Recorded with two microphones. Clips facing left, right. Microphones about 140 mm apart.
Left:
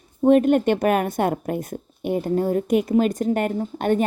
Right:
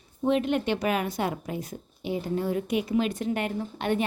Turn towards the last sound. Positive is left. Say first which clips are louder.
# left 6 dB
turn(degrees=45)  # may be behind; listen again after turning